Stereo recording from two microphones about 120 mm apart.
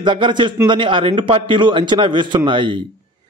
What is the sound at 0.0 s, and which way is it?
A man's voice, 40° right (ahead or behind).